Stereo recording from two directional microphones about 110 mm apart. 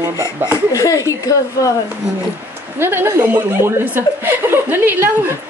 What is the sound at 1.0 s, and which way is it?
Speech, 30° left (ahead or behind).